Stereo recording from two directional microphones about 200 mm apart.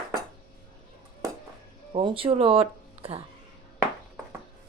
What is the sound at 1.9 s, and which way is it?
Speech, 25° right (ahead or behind).